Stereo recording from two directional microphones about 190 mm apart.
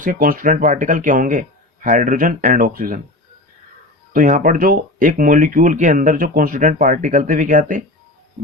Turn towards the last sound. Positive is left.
turn(degrees=-45)  # may be behind; listen again after turning